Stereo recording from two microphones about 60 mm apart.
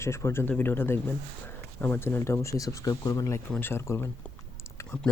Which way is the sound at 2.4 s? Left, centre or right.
Left.